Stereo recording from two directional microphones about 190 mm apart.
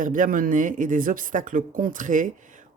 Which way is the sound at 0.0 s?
45° right (ahead or behind).